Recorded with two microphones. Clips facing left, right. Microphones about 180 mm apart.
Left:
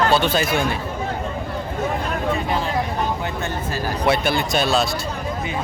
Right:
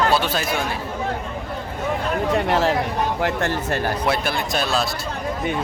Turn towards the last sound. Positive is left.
turn(degrees=0)  # may be behind; listen again after turning